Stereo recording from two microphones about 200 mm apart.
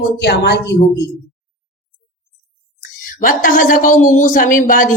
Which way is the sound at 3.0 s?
40° left (ahead or behind).